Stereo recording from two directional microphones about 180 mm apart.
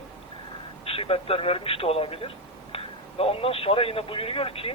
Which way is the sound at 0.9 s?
30° left (ahead or behind).